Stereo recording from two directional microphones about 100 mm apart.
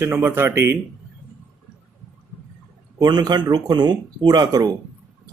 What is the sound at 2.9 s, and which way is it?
Speech, 40° right (ahead or behind).